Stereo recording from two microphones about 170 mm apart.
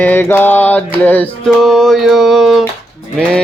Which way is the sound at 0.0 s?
10° left (ahead or behind).